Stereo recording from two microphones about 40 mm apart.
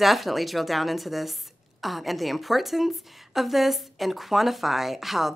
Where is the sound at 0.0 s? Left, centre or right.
Centre.